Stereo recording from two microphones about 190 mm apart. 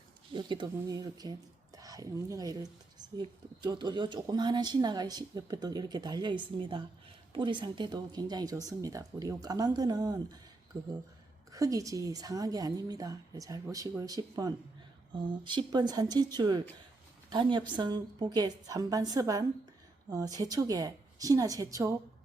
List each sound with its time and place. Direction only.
0.3 s speech: 25° right (ahead or behind)